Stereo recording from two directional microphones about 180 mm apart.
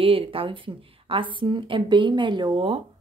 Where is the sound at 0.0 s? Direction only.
30° right (ahead or behind).